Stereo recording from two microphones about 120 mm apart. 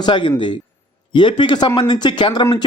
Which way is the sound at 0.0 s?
40° left (ahead or behind).